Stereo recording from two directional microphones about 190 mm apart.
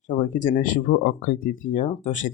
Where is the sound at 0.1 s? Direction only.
40° left (ahead or behind).